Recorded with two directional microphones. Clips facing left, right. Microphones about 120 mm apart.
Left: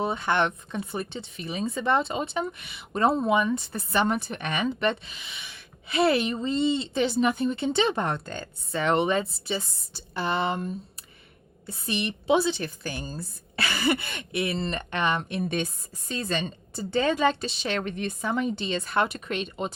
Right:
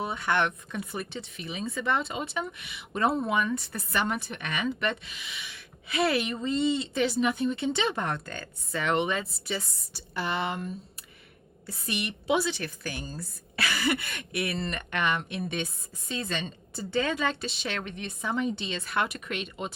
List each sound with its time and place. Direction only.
0.0 s speech: 30° left (ahead or behind)
7.2 s speech: 40° left (ahead or behind)
17.8 s speech: 45° left (ahead or behind)